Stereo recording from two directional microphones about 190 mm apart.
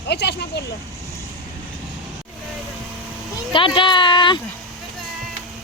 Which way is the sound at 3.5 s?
25° left (ahead or behind).